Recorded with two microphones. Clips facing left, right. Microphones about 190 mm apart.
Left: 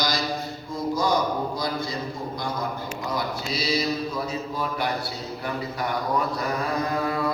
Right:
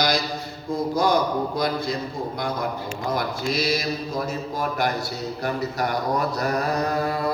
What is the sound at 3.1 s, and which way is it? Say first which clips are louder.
Mantra: right 4 dB; 50° right (ahead or behind).